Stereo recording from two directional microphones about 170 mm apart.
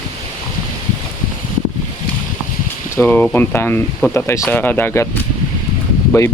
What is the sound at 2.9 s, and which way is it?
Speech, 10° left (ahead or behind).